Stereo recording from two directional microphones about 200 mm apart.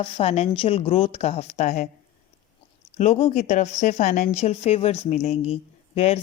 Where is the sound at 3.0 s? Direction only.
30° left (ahead or behind).